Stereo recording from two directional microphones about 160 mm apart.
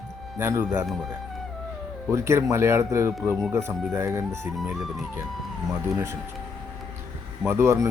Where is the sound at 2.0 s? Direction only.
15° right (ahead or behind).